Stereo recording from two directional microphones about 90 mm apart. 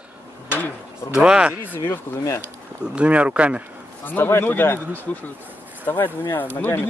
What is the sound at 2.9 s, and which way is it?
Speech, 15° right (ahead or behind).